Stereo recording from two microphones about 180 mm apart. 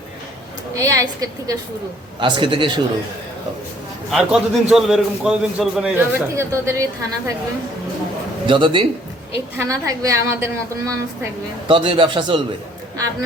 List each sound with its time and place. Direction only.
0.8 s a woman's voice: 15° right (ahead or behind)
4.1 s a man's voice: centre (ahead or behind)
8.4 s a man's voice: 25° right (ahead or behind)
9.3 s a woman's voice: 15° right (ahead or behind)
11.7 s a man's voice: 30° right (ahead or behind)